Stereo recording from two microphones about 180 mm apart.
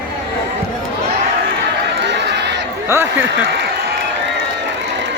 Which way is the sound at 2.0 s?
70° right (ahead or behind).